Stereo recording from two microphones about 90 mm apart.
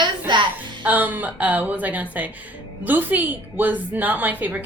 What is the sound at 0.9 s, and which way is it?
A woman's voice, 20° right (ahead or behind).